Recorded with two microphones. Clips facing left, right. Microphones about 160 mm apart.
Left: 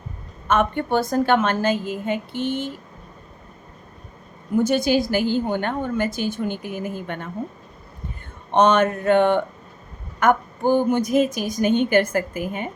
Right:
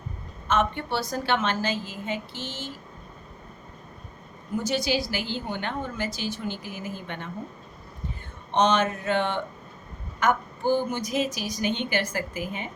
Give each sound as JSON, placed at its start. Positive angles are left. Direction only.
{"t": 0.4, "sound": "a woman's voice", "side_deg": 55}
{"t": 4.6, "sound": "a woman's voice", "side_deg": 50}
{"t": 8.5, "sound": "a sound", "side_deg": 55}
{"t": 10.2, "sound": "a woman's voice", "side_deg": 55}